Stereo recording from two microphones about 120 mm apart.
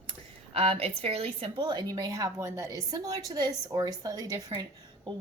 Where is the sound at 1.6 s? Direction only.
35° right (ahead or behind).